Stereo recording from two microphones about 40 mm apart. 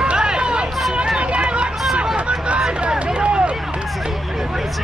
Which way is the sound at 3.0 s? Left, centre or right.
Right.